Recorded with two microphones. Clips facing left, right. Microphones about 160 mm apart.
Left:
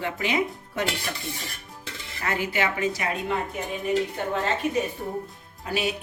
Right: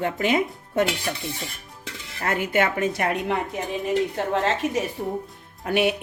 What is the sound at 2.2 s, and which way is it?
Speech, 55° right (ahead or behind).